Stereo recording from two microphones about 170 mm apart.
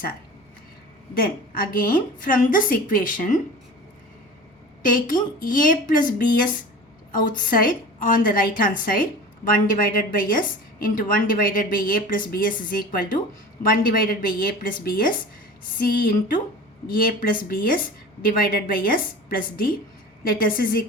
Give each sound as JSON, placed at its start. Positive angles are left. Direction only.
{"t": 1.1, "sound": "a woman's voice", "side_deg": 60}
{"t": 4.8, "sound": "a woman's voice", "side_deg": 55}